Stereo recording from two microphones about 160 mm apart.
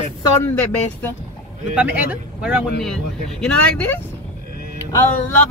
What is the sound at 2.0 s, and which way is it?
Speech, 5° right (ahead or behind).